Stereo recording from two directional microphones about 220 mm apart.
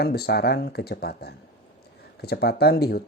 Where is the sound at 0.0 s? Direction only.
45° left (ahead or behind).